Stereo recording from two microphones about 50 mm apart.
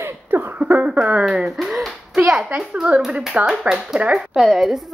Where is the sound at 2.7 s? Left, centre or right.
Right.